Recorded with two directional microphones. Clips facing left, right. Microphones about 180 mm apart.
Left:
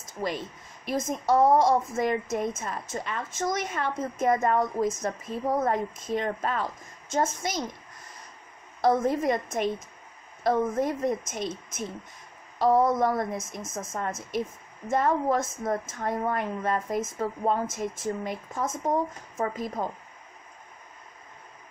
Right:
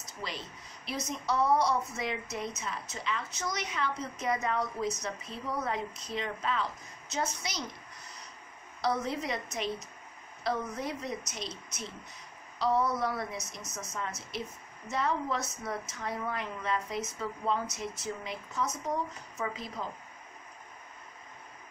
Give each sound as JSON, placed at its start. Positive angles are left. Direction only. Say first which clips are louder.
{"t": 0.0, "sound": "a woman's voice", "louder": "left 9 dB", "side_deg": 50}
{"t": 7.3, "sound": "a sound", "louder": "left 7 dB", "side_deg": 50}
{"t": 8.8, "sound": "a woman's voice", "louder": "left 8 dB", "side_deg": 50}